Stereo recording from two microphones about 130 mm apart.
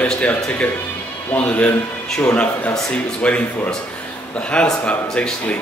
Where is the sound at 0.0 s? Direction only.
10° left (ahead or behind).